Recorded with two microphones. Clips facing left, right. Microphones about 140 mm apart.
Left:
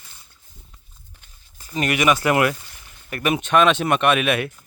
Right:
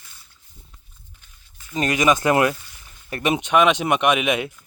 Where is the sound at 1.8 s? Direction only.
25° right (ahead or behind).